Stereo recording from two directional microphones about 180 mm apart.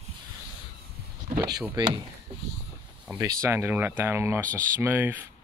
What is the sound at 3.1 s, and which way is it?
Speech, 15° right (ahead or behind).